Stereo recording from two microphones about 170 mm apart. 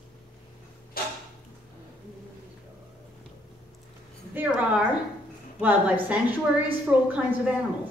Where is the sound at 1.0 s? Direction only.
60° left (ahead or behind).